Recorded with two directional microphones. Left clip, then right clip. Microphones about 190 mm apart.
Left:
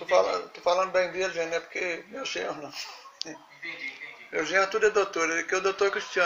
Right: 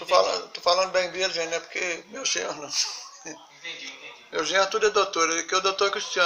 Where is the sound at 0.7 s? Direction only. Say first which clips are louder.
Right 1 dB; centre (ahead or behind).